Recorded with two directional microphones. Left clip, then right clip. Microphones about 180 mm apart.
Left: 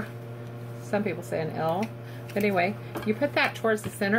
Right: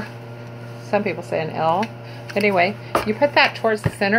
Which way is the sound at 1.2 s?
15° left (ahead or behind).